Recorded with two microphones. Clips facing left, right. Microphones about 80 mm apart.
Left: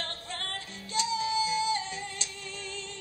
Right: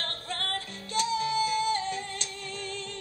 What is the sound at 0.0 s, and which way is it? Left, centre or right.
Music, right.